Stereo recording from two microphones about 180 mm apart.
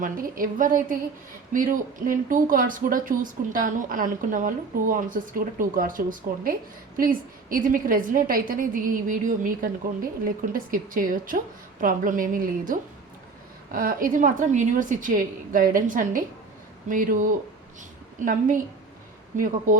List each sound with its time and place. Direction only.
0.0 s speech: 50° right (ahead or behind)
18.3 s speech: 50° right (ahead or behind)